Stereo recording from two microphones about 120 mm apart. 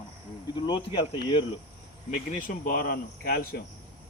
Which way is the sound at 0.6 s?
40° left (ahead or behind).